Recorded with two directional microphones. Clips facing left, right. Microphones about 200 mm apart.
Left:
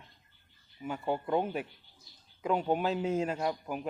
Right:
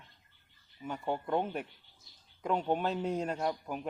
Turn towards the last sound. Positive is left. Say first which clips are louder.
# left 1 dB
turn(degrees=5)  # may be behind; listen again after turning